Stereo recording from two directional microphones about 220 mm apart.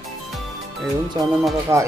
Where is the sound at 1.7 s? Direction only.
10° right (ahead or behind).